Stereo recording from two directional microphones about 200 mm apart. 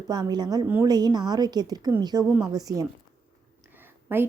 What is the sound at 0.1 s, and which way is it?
A woman's voice, 20° right (ahead or behind).